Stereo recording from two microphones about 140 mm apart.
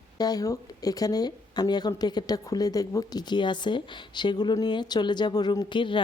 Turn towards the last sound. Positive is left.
turn(degrees=35)  # may be behind; listen again after turning